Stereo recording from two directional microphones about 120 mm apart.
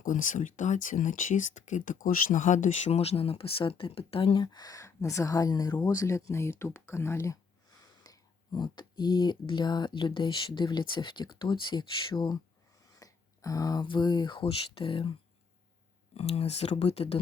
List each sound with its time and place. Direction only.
0.0 s speech: 90° left; by 7.3 s 20° left (ahead or behind)
8.0 s speech: 35° left (ahead or behind)
16.1 s speech: 55° left (ahead or behind)